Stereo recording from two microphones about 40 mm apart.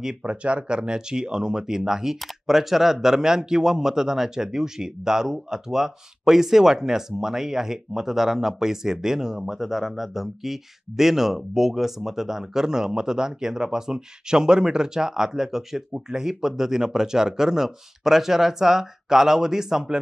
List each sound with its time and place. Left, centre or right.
0.2 s speech: right; by 20.0 s centre